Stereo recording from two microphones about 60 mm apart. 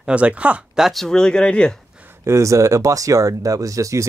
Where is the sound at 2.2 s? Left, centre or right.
Right.